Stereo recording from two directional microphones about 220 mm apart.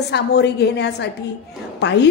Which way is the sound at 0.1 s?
50° left (ahead or behind).